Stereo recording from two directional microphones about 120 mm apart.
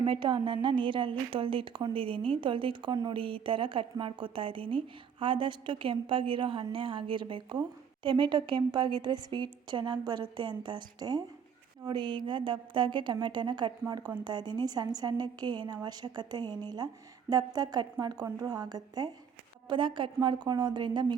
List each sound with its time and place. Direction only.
0.0 s a woman's voice: 40° right (ahead or behind)